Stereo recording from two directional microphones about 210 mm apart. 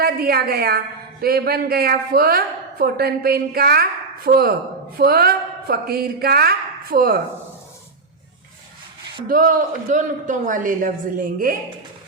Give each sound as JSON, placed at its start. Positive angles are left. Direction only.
{"t": 0.0, "sound": "a woman's voice", "side_deg": -45}
{"t": 9.2, "sound": "a man's voice", "side_deg": -40}